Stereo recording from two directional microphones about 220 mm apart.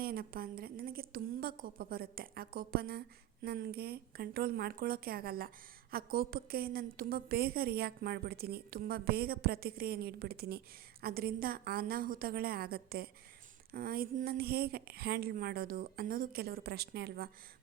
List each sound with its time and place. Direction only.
0.0 s a woman's voice: 45° right (ahead or behind)